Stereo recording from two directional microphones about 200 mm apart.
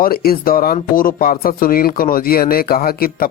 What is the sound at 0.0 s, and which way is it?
Speech, 50° left (ahead or behind).